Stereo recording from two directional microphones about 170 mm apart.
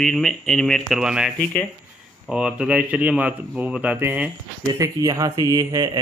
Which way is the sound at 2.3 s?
5° right (ahead or behind).